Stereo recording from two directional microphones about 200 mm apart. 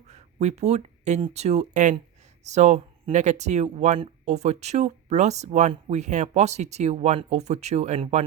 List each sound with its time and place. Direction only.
0.1 s speech: 35° right (ahead or behind)